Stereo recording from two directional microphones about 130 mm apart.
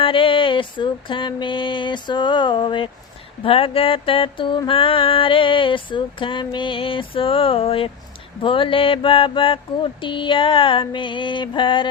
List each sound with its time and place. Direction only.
0.0 s mantra: 45° left (ahead or behind)